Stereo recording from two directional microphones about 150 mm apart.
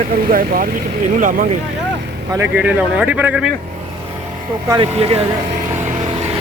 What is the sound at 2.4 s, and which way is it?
Speech, 10° right (ahead or behind).